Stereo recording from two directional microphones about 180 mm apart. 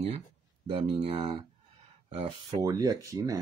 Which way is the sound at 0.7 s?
30° right (ahead or behind).